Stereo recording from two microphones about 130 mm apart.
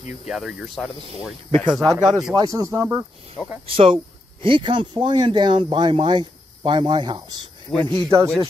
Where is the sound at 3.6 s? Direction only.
45° right (ahead or behind).